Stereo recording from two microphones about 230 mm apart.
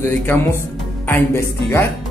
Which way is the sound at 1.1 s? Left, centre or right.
Centre.